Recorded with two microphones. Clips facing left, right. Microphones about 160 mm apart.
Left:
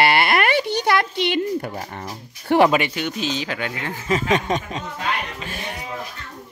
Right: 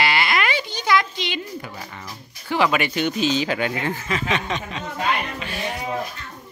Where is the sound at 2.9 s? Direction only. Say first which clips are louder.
Right 4 dB; centre (ahead or behind).